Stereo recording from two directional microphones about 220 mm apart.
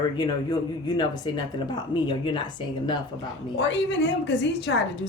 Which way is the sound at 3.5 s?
55° left (ahead or behind).